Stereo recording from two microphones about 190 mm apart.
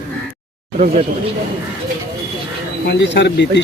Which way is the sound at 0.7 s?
35° right (ahead or behind).